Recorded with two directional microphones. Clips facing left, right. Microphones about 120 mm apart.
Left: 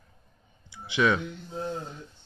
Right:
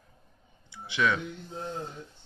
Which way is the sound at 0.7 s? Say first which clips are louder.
Left 3 dB; 15° left (ahead or behind).